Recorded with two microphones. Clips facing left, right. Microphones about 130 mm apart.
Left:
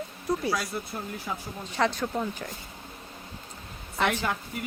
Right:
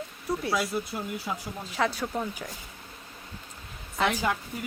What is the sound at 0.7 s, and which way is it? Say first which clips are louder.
Speech: right 3 dB; 20° right (ahead or behind).